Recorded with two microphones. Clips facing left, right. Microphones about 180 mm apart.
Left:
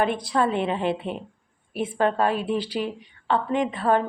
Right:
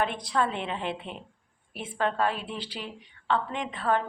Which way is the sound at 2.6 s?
10° left (ahead or behind).